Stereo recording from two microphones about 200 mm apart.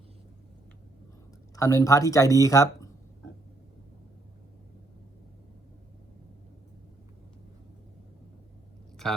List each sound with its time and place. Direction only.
1.5 s speech: 15° left (ahead or behind)